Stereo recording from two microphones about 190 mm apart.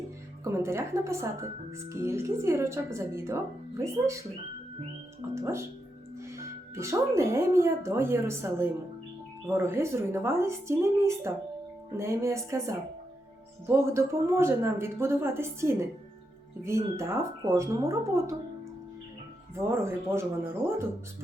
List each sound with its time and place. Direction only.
0.4 s a woman's voice: 15° right (ahead or behind)
5.3 s a woman's voice: 15° right (ahead or behind)
19.5 s a woman's voice: 15° right (ahead or behind)